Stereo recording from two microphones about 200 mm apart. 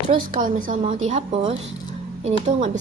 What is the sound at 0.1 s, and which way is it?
A woman's voice, 45° right (ahead or behind).